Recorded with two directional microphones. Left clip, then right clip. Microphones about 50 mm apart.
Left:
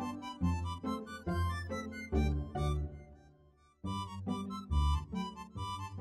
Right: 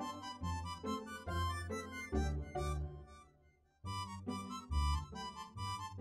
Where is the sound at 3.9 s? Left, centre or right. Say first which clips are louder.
Left 3 dB; left.